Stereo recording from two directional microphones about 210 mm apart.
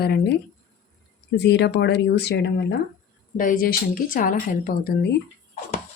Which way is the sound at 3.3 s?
40° left (ahead or behind).